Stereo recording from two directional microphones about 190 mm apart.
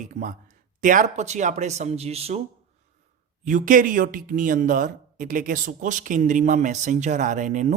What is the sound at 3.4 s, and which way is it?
A man's voice, 45° right (ahead or behind).